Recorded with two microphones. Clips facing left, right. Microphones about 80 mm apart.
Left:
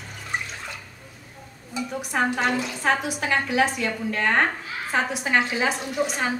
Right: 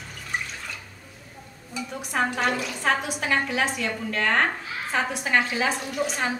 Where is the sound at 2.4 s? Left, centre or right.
Left.